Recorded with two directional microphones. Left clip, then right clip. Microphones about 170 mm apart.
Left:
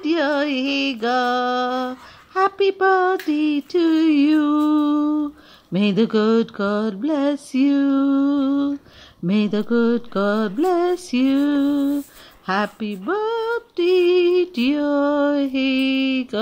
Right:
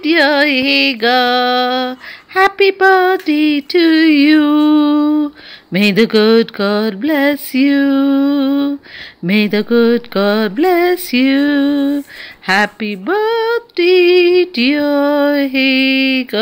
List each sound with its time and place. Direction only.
0.0 s music: 10° right (ahead or behind)